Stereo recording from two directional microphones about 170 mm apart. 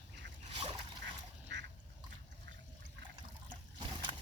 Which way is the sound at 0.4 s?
35° right (ahead or behind).